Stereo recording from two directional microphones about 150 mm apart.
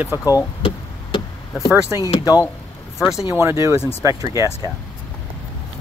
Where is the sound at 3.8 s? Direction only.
15° left (ahead or behind).